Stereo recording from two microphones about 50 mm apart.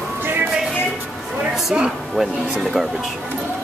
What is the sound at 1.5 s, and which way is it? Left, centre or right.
Speech, centre.